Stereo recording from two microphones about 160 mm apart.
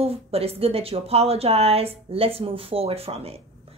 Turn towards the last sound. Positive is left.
turn(degrees=-40)  # may be behind; listen again after turning